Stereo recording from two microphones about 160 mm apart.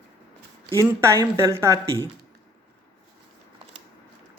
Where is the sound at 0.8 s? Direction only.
15° right (ahead or behind).